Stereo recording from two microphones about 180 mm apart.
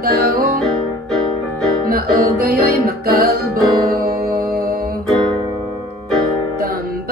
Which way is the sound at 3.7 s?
20° right (ahead or behind).